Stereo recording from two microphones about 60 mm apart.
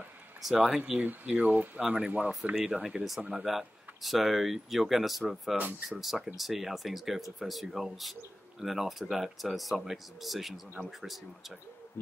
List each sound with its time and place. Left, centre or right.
0.4 s speech: centre
1.2 s speech: right
1.8 s speech: centre
2.5 s speech: centre